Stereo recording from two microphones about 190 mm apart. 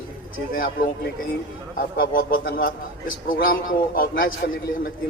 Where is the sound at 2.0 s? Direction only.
50° left (ahead or behind).